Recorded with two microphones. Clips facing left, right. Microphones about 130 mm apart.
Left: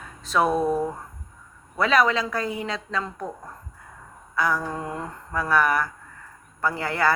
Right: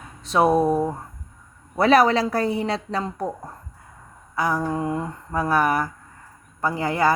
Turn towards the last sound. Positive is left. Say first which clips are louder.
# right 3 dB
turn(degrees=-20)  # may be behind; listen again after turning